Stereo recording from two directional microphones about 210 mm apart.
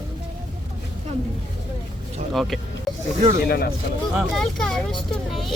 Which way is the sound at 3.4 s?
50° left (ahead or behind).